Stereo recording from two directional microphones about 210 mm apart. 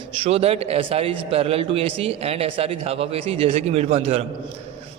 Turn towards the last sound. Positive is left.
turn(degrees=-30)  # may be behind; listen again after turning